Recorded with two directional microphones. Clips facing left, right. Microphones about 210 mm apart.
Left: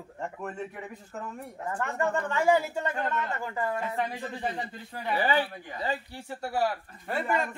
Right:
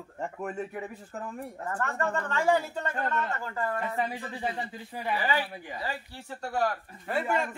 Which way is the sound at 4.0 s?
5° right (ahead or behind).